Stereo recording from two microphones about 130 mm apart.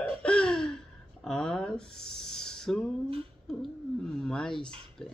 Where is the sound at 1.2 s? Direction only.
5° left (ahead or behind).